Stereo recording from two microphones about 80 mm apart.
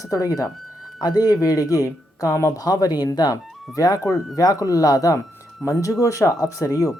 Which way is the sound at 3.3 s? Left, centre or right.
Left.